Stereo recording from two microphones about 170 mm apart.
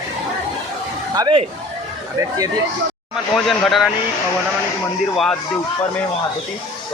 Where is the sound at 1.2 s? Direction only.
25° right (ahead or behind).